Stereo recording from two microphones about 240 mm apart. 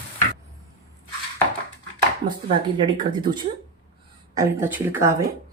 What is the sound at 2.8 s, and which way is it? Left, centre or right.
Speech, centre.